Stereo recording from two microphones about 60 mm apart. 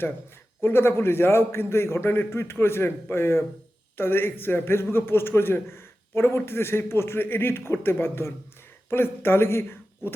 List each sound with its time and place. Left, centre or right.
0.6 s a man's voice: left